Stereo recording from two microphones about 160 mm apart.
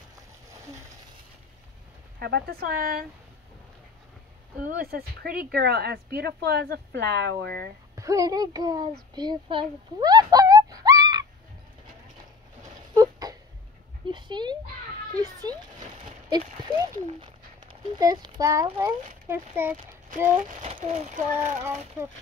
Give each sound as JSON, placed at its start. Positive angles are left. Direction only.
{"t": 2.1, "sound": "speech", "side_deg": -80}
{"t": 4.6, "sound": "a woman's voice", "side_deg": -65}
{"t": 7.9, "sound": "speech", "side_deg": -20}
{"t": 9.1, "sound": "a sound", "side_deg": -25}
{"t": 12.6, "sound": "a sound", "side_deg": -25}
{"t": 14.0, "sound": "dog", "side_deg": -30}
{"t": 15.1, "sound": "a child's voice", "side_deg": -25}
{"t": 16.5, "sound": "a sound", "side_deg": -25}
{"t": 17.9, "sound": "a child's voice", "side_deg": -25}
{"t": 20.4, "sound": "speech", "side_deg": -50}
{"t": 21.3, "sound": "a child's voice", "side_deg": -15}